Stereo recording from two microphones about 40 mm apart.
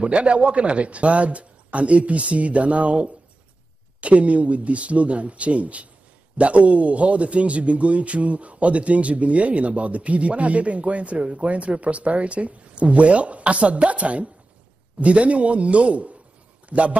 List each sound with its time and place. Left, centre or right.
0.0 s a man's voice: right